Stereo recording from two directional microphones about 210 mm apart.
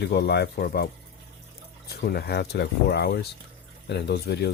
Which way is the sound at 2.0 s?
45° left (ahead or behind).